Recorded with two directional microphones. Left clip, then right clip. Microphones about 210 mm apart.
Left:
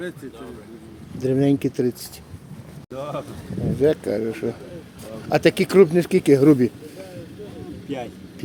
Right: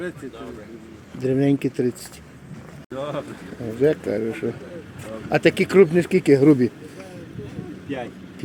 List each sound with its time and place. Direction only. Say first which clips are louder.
1.2 s speech: left 1 dB; 5° left (ahead or behind)
2.9 s speech: right 1 dB; 20° left (ahead or behind)
3.8 s speech: even; 5° right (ahead or behind)
7.9 s speech: even; centre (ahead or behind)